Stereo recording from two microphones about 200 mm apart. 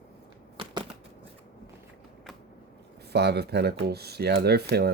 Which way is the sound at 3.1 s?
55° right (ahead or behind).